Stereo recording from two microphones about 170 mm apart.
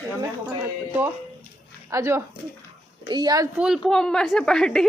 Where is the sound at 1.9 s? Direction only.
15° right (ahead or behind).